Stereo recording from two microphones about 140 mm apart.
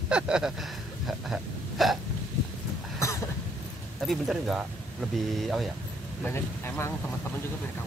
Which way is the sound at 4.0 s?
Centre (ahead or behind).